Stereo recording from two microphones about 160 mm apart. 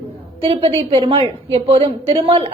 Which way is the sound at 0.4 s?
35° right (ahead or behind).